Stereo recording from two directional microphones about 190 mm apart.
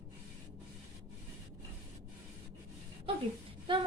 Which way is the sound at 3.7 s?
25° right (ahead or behind).